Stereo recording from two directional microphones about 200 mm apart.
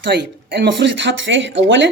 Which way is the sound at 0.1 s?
55° right (ahead or behind).